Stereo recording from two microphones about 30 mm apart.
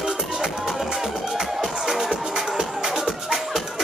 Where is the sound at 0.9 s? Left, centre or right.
Centre.